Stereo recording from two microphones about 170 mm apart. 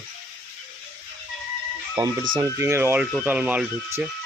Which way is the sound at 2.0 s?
25° right (ahead or behind).